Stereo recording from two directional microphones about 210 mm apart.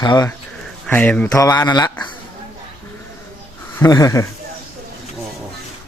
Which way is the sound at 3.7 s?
15° left (ahead or behind).